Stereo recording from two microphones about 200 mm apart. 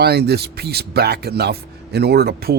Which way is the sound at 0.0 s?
55° right (ahead or behind).